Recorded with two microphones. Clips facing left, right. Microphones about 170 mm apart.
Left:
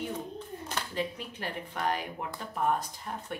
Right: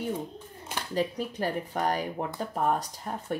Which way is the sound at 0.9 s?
40° right (ahead or behind).